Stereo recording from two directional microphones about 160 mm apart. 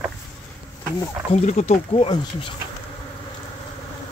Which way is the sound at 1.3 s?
45° left (ahead or behind).